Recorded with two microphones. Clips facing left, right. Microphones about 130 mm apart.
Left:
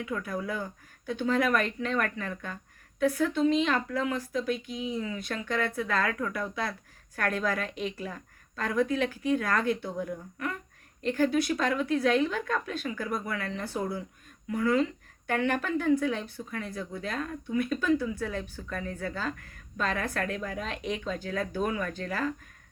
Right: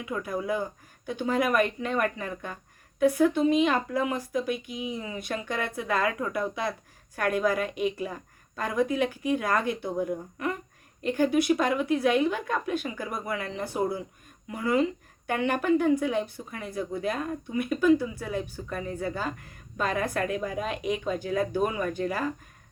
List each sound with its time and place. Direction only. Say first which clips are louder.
0.0 s speech: right 2 dB; 15° right (ahead or behind)